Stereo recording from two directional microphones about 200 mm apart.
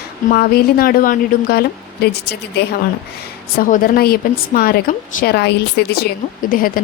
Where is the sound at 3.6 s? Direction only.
45° left (ahead or behind).